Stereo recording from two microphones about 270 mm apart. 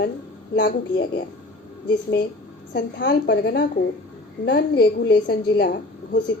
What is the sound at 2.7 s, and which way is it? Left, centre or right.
A woman's voice, left.